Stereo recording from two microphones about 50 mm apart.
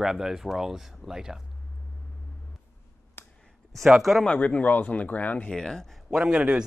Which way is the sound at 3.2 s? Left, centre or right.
Left.